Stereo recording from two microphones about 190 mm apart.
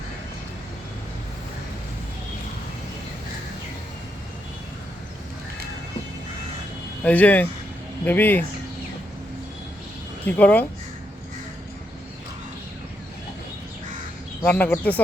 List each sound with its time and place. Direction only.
7.0 s speech: 10° left (ahead or behind)
10.2 s speech: 10° left (ahead or behind)
14.4 s speech: 10° left (ahead or behind)